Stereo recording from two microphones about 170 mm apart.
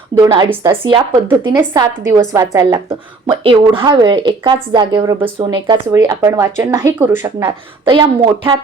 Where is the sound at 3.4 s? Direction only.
30° right (ahead or behind).